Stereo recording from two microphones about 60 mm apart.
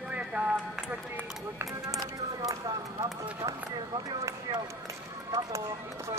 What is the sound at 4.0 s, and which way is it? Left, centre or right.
Speech, right.